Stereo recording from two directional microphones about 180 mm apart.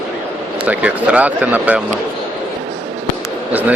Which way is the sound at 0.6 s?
5° right (ahead or behind).